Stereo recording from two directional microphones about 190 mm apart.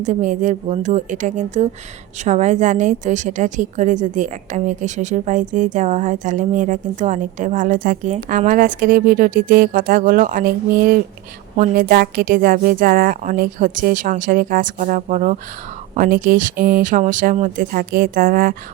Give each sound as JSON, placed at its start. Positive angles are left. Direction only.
{"t": 0.0, "sound": "a woman's voice", "side_deg": -40}